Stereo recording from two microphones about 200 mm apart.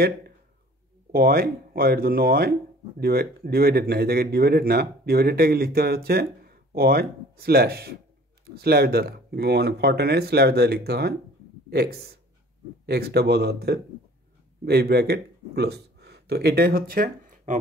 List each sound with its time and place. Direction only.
1.1 s speech: 50° right (ahead or behind)